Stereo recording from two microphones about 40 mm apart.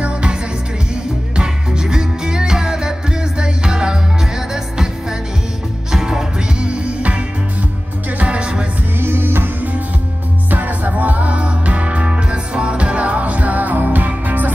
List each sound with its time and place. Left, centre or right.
0.0 s music: right
5.9 s music: centre
6.7 s music: right
9.0 s music: right
10.5 s music: right